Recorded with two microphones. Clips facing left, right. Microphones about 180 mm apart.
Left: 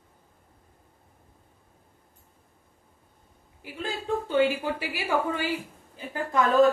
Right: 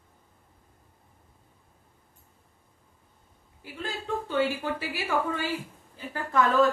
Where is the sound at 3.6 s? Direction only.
15° left (ahead or behind).